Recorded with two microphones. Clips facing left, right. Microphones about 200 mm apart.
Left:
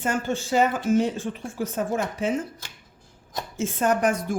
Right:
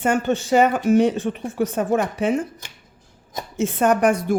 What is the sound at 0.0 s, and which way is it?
Speech, 65° right (ahead or behind).